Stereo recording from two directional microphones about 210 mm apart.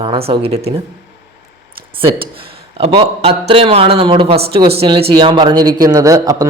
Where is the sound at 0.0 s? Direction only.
25° right (ahead or behind).